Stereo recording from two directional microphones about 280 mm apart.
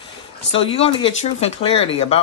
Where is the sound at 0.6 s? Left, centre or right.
Centre.